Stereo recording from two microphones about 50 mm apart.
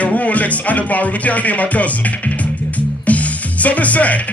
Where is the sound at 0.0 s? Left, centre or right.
Left.